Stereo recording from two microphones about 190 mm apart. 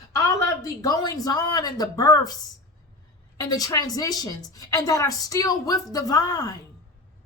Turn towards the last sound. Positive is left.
turn(degrees=20)  # may be behind; listen again after turning